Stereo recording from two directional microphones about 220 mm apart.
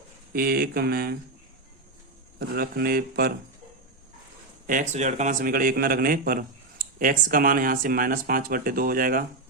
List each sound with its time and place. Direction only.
0.3 s speech: 45° right (ahead or behind)
2.6 s speech: 45° right (ahead or behind)
4.6 s a man's voice: 35° right (ahead or behind)